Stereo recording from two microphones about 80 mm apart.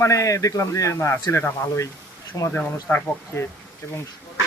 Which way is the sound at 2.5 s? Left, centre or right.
Left.